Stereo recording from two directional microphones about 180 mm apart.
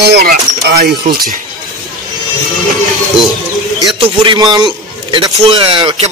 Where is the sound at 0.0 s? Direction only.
65° right (ahead or behind).